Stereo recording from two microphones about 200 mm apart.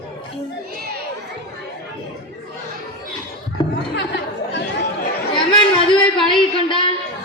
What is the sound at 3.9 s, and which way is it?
Chatter, 60° left (ahead or behind).